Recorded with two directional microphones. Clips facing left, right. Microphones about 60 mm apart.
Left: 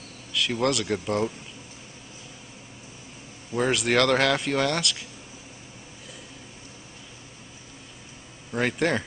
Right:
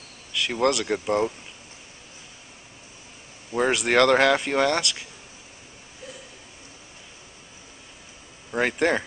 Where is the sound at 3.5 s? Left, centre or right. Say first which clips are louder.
Right 1 dB; centre.